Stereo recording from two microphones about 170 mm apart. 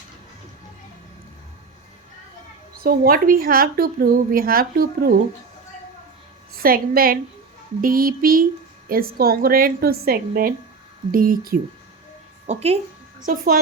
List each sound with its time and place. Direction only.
2.8 s a woman's voice: 60° right (ahead or behind)
6.6 s a woman's voice: 60° right (ahead or behind)
12.5 s speech: 40° right (ahead or behind)
13.2 s a woman's voice: 55° right (ahead or behind)